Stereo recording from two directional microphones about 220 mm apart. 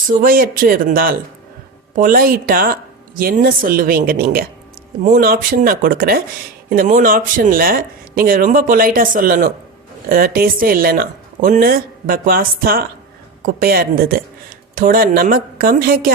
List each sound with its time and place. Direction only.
0.1 s speech: 40° right (ahead or behind)